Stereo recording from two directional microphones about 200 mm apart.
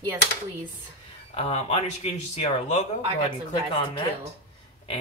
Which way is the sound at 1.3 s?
30° left (ahead or behind).